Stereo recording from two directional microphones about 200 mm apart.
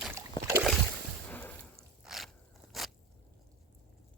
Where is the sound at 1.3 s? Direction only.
10° left (ahead or behind).